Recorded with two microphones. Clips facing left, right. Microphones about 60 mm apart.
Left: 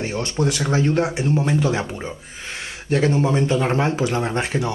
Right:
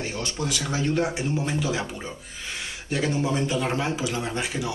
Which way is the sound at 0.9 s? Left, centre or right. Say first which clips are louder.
Left 4 dB; centre.